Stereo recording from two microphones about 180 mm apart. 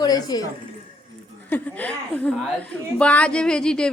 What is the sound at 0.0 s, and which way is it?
Speech, 20° left (ahead or behind).